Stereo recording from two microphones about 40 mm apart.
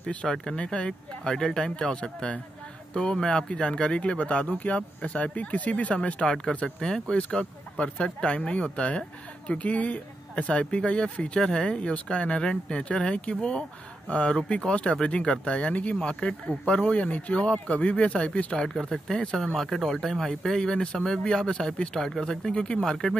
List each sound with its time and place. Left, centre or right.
0.0 s speech: left
9.6 s speech: left
18.6 s speech: centre
22.2 s speech: centre